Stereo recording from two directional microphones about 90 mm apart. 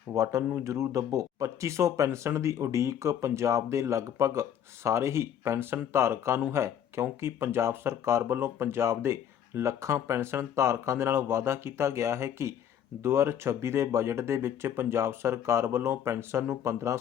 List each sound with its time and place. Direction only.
0.1 s speech: 40° right (ahead or behind)